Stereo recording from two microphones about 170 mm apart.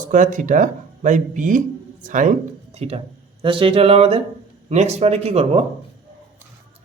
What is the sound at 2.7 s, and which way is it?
Speech, 35° right (ahead or behind).